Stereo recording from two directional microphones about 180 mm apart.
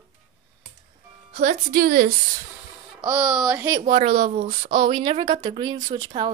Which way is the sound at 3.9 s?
30° right (ahead or behind).